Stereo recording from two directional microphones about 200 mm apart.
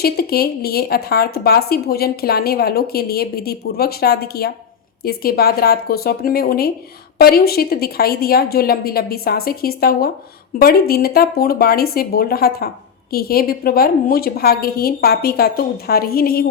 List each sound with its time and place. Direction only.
0.0 s speech: 50° left (ahead or behind)